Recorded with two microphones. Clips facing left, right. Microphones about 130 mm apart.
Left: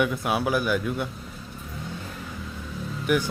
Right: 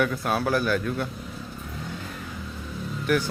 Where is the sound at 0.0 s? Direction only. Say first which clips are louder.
Even; 10° left (ahead or behind).